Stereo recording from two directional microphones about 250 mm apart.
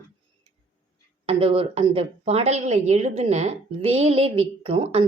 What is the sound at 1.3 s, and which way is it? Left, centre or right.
Speech, right.